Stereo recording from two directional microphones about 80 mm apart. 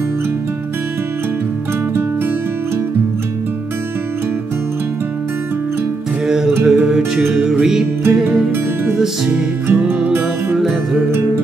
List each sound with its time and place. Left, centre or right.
6.2 s music: centre
9.7 s music: right
9.9 s music: centre
10.6 s music: centre